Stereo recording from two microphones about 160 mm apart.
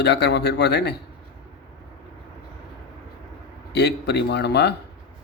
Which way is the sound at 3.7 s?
90° left.